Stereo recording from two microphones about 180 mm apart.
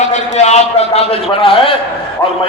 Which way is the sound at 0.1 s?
40° left (ahead or behind).